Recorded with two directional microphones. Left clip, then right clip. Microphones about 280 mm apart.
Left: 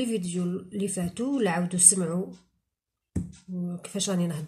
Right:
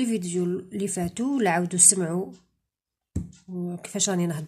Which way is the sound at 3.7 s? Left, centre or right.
Right.